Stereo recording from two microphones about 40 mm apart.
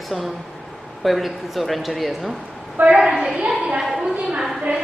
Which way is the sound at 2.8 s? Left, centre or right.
Centre.